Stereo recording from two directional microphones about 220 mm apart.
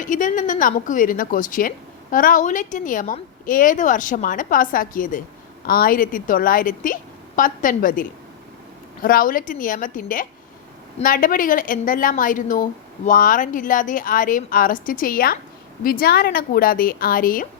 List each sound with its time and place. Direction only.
0.0 s a woman's voice: 35° left (ahead or behind)